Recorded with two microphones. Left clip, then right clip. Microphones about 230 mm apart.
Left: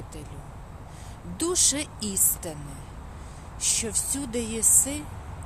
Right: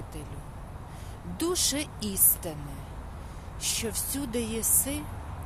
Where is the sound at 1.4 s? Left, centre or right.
Centre.